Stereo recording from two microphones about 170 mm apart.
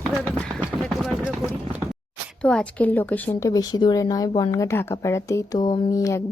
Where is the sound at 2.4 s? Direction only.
5° left (ahead or behind).